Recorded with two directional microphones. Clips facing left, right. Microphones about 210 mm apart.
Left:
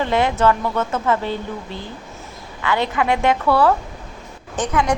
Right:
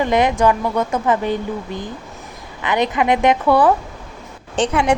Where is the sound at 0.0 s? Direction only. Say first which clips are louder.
Right 2 dB; 15° right (ahead or behind).